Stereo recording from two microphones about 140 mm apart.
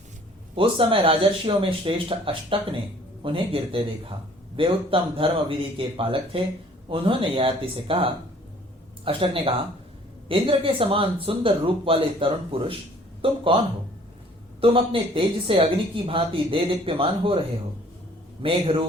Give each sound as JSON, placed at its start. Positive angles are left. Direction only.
{"t": 0.5, "sound": "speech", "side_deg": -40}
{"t": 14.6, "sound": "speech", "side_deg": -40}
{"t": 18.4, "sound": "speech", "side_deg": -40}